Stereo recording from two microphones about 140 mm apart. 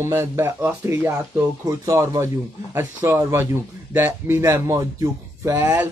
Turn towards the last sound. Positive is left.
turn(degrees=-10)  # may be behind; listen again after turning